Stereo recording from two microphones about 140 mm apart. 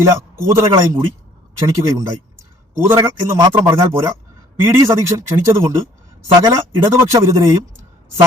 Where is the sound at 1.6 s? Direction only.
20° right (ahead or behind).